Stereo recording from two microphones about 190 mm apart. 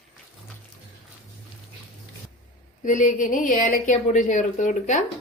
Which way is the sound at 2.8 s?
40° left (ahead or behind).